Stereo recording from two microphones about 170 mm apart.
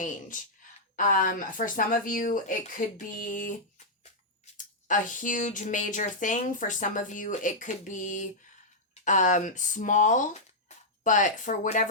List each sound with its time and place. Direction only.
0.9 s speech: 50° left (ahead or behind)
3.8 s a sound: 40° left (ahead or behind)
4.5 s speech: 50° left (ahead or behind)